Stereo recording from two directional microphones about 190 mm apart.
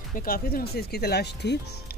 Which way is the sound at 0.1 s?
50° left (ahead or behind).